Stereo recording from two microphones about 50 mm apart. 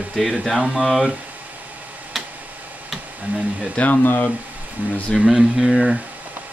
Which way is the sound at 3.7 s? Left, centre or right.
Left.